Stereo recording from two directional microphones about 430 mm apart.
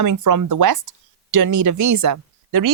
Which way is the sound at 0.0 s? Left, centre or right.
Right.